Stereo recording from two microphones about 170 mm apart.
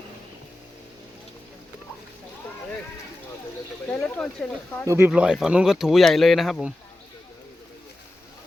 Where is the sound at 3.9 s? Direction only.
10° left (ahead or behind).